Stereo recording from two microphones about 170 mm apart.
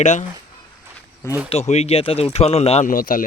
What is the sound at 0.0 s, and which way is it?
Speech, 45° left (ahead or behind).